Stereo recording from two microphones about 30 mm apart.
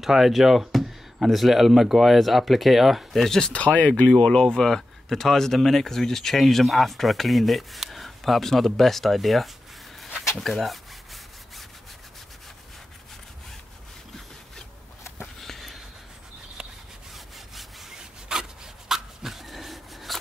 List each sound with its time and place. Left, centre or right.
0.0 s speech: centre
3.3 s speech: centre
3.5 s speech: left
4.2 s speech: left; by 10.8 s centre
15.4 s a sound: centre
16.6 s rub: right
17.1 s sawing: centre
17.9 s rub: centre